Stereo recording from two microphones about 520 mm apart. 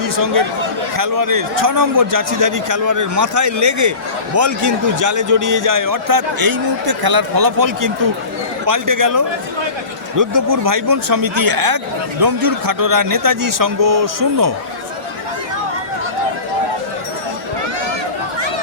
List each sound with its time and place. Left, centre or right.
0.0 s a man's voice: right